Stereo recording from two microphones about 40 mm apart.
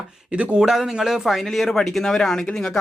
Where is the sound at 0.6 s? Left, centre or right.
Centre.